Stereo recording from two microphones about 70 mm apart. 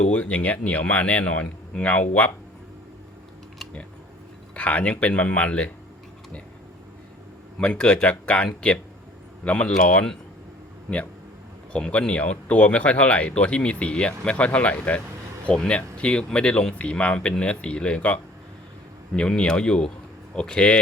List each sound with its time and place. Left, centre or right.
0.1 s speech: centre
4.5 s speech: centre
7.6 s speech: centre
11.7 s speech: centre